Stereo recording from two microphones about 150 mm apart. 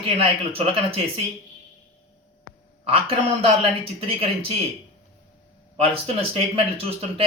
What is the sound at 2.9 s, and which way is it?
Speech, 40° right (ahead or behind).